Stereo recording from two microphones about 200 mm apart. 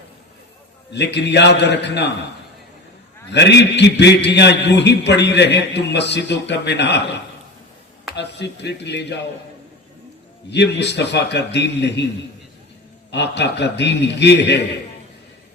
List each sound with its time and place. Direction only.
0.9 s a man's voice: 60° left (ahead or behind)
3.3 s a man's voice: 60° left (ahead or behind)
10.5 s a man's voice: 60° left (ahead or behind)
13.1 s a man's voice: 60° left (ahead or behind)